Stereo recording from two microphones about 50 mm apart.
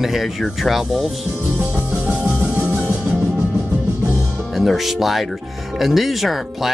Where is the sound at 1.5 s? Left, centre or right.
Right.